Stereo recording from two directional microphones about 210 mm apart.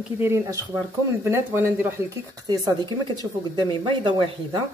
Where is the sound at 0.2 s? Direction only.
10° right (ahead or behind).